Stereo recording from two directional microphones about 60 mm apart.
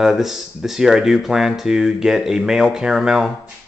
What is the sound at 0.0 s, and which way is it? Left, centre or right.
Speech, centre.